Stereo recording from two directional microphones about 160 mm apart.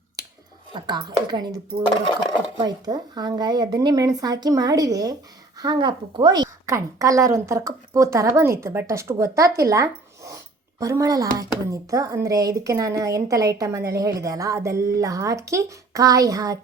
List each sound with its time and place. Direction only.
0.7 s a woman's voice: 30° right (ahead or behind)
2.6 s a woman's voice: 25° right (ahead or behind)